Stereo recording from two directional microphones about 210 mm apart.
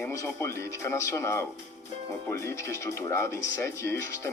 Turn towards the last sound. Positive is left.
turn(degrees=15)  # may be behind; listen again after turning